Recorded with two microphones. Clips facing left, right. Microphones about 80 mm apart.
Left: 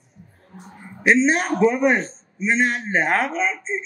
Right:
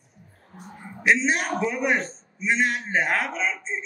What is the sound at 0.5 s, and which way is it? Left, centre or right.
A man's voice, left.